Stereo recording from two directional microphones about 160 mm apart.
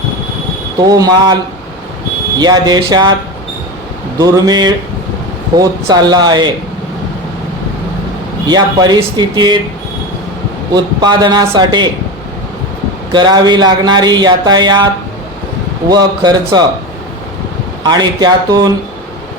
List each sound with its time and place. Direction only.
0.9 s speech: 25° right (ahead or behind)
2.4 s speech: 25° right (ahead or behind)
4.2 s speech: 25° right (ahead or behind)
8.4 s speech: 25° right (ahead or behind)
10.8 s speech: 25° right (ahead or behind)
13.1 s speech: 25° right (ahead or behind)
15.9 s speech: 25° right (ahead or behind)
17.8 s speech: 25° right (ahead or behind)